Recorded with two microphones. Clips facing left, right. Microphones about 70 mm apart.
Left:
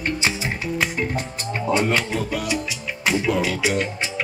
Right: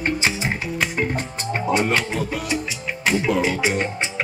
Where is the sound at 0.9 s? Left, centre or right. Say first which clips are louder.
Right 1 dB; right.